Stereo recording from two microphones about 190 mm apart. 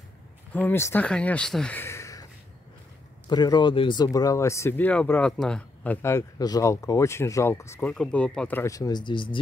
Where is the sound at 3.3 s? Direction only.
20° left (ahead or behind).